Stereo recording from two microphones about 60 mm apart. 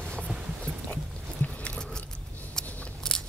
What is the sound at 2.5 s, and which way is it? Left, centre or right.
Scissors, centre.